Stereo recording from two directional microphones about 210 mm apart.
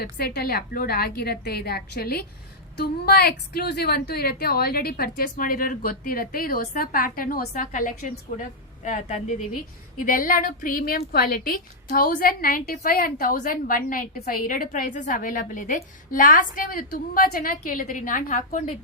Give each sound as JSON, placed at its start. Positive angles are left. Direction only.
{"t": 0.0, "sound": "a woman's voice", "side_deg": 45}